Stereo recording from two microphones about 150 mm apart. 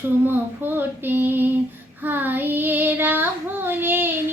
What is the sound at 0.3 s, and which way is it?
Child singing, 15° right (ahead or behind).